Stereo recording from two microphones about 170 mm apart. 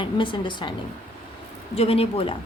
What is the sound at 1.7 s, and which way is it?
Speech, 35° left (ahead or behind).